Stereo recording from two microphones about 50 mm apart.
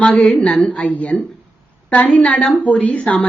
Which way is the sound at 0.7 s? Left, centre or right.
Left.